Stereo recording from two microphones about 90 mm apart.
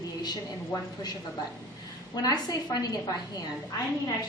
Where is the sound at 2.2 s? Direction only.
50° left (ahead or behind).